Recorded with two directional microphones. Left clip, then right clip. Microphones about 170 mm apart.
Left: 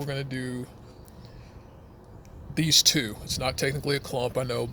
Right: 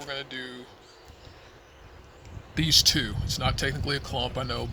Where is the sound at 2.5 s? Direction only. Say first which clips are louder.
Even; 45° left (ahead or behind).